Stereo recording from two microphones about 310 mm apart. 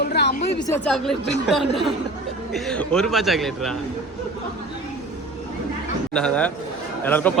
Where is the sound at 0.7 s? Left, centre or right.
Centre.